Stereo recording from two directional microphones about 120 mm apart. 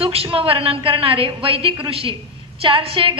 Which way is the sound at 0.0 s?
50° right (ahead or behind).